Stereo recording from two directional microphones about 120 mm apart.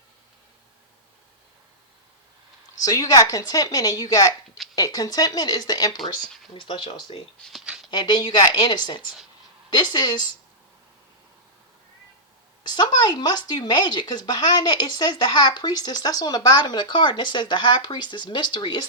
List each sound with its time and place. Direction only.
2.8 s a woman's voice: 30° left (ahead or behind)
6.0 s speech: centre (ahead or behind)
6.5 s speech: 45° left (ahead or behind)
7.6 s a sound: 5° right (ahead or behind)
7.9 s speech: 40° left (ahead or behind)
12.6 s speech: 35° left (ahead or behind)